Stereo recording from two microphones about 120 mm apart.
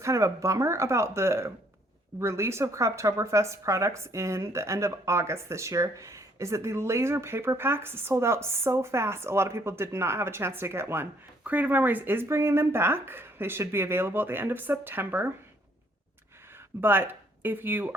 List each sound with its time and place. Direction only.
0.0 s a woman's voice: 25° right (ahead or behind)
16.8 s speech: 15° right (ahead or behind)